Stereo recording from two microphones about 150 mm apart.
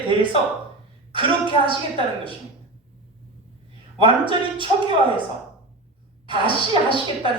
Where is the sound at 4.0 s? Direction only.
35° right (ahead or behind).